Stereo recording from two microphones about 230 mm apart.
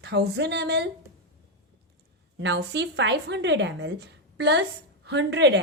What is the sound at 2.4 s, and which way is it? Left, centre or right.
A woman's voice, right.